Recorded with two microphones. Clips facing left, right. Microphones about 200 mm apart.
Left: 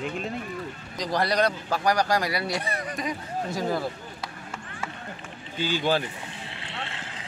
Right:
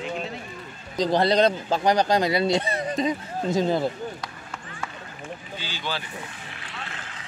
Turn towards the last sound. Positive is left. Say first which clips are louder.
# left 2 dB
turn(degrees=30)  # may be behind; listen again after turning